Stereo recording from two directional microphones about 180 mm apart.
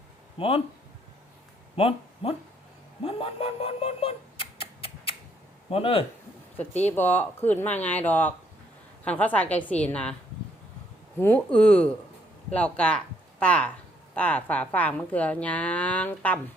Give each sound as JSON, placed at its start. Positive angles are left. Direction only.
{"t": 0.3, "sound": "speech", "side_deg": 30}
{"t": 1.7, "sound": "speech", "side_deg": 30}
{"t": 3.0, "sound": "a sound", "side_deg": 30}
{"t": 5.7, "sound": "speech", "side_deg": 30}
{"t": 6.8, "sound": "speech", "side_deg": 10}
{"t": 11.2, "sound": "speech", "side_deg": 10}